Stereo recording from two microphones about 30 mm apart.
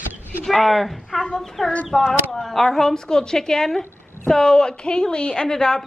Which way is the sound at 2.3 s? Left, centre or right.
Centre.